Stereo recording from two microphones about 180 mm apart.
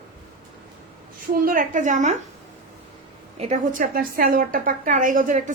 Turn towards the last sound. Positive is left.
turn(degrees=-45)  # may be behind; listen again after turning